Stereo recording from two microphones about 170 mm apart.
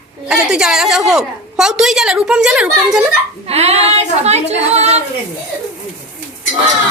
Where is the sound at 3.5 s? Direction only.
40° right (ahead or behind).